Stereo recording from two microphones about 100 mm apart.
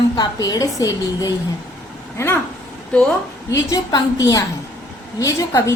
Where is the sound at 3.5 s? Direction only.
35° left (ahead or behind).